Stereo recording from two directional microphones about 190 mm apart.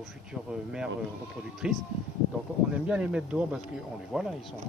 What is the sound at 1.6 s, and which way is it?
Speech, 5° right (ahead or behind).